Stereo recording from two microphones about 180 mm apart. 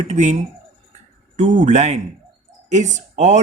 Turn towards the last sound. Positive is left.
turn(degrees=-40)  # may be behind; listen again after turning